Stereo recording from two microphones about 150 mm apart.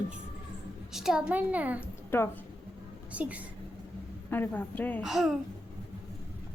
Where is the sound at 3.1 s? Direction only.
10° right (ahead or behind).